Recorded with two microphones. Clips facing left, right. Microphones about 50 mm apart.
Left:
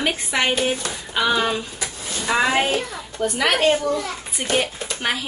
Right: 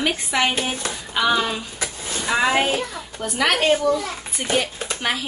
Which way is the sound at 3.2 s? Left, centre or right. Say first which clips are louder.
Left 1 dB; centre.